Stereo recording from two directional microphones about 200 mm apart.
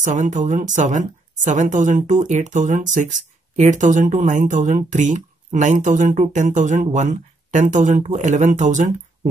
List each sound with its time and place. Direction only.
0.0 s a woman's voice: 40° right (ahead or behind)